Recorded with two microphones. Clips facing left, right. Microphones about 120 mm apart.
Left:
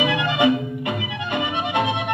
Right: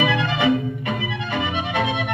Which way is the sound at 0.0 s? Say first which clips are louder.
Left 1 dB; 15° left (ahead or behind).